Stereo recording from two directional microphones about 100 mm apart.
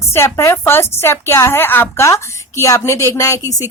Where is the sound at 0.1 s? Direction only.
25° left (ahead or behind).